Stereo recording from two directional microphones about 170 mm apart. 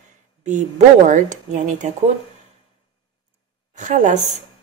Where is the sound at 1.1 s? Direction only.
50° right (ahead or behind).